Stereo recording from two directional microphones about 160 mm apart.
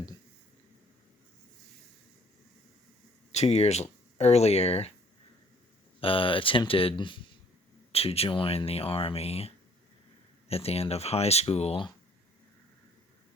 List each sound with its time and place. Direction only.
3.3 s speech: 40° left (ahead or behind)
6.0 s speech: 35° left (ahead or behind)
10.5 s speech: 40° left (ahead or behind)